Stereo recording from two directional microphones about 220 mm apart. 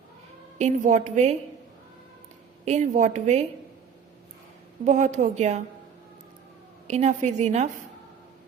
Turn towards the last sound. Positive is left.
turn(degrees=-30)  # may be behind; listen again after turning